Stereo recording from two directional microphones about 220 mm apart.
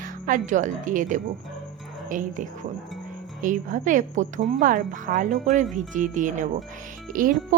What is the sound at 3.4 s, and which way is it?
Speech, 35° right (ahead or behind).